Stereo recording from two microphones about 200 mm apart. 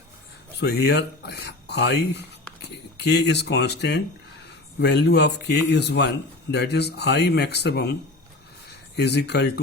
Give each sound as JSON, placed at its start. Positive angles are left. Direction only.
{"t": 0.6, "sound": "speech", "side_deg": 55}
{"t": 9.0, "sound": "speech", "side_deg": 55}